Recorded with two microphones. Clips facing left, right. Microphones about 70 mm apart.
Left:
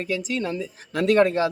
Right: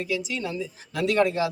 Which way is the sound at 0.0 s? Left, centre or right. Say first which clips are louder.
Left 2 dB; left.